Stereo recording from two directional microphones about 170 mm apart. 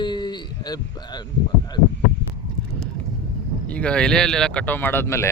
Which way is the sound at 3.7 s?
5° left (ahead or behind).